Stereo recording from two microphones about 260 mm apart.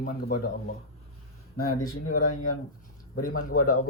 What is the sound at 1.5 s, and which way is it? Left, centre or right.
Speech, left.